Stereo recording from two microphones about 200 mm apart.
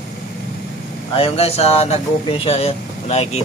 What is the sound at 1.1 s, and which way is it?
Speech, 30° left (ahead or behind).